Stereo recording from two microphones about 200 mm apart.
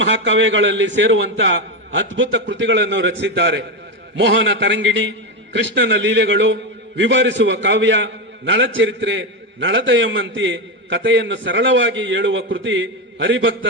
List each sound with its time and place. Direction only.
0.0 s a man's voice: 65° right (ahead or behind)